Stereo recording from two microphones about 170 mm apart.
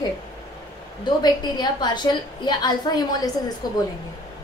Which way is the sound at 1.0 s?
25° left (ahead or behind).